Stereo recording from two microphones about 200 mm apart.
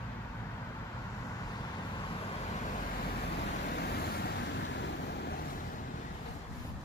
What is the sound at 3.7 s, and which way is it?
Vehicle, 50° left (ahead or behind).